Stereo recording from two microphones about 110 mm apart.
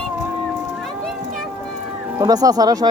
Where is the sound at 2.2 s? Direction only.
35° right (ahead or behind).